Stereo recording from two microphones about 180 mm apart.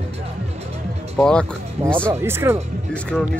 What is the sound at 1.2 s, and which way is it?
Speech, 5° left (ahead or behind).